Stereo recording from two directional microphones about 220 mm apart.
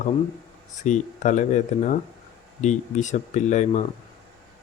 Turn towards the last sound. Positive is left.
turn(degrees=30)  # may be behind; listen again after turning